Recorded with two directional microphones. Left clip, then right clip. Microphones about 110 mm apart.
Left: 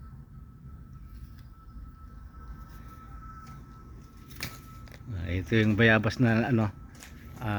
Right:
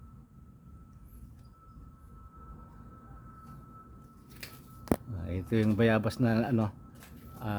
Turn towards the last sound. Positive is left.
turn(degrees=25)  # may be behind; listen again after turning